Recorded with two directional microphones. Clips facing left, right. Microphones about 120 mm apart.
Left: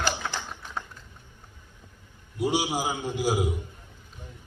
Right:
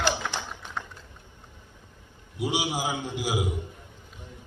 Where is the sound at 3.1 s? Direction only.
15° right (ahead or behind).